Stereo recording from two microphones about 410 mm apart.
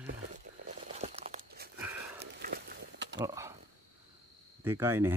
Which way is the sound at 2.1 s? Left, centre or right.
Right.